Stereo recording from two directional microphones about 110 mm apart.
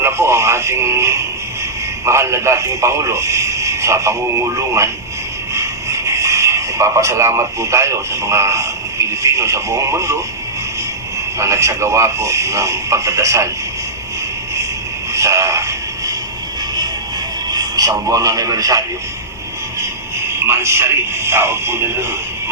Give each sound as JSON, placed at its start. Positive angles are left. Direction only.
{"t": 0.0, "sound": "radio", "side_deg": -25}
{"t": 2.0, "sound": "a man's voice", "side_deg": -25}
{"t": 11.3, "sound": "a man's voice", "side_deg": -30}
{"t": 15.1, "sound": "a sound", "side_deg": -30}
{"t": 17.5, "sound": "speech", "side_deg": -35}
{"t": 20.5, "sound": "a man's voice", "side_deg": -25}